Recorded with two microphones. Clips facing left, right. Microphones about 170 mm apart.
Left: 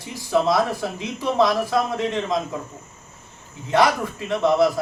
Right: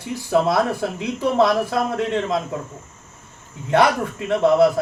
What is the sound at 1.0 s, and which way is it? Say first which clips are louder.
Speech: right 2 dB; 60° right (ahead or behind).